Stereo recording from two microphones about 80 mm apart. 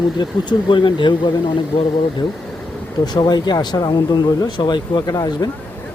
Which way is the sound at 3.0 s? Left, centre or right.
Left.